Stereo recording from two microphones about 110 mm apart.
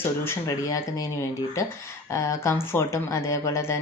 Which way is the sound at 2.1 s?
25° left (ahead or behind).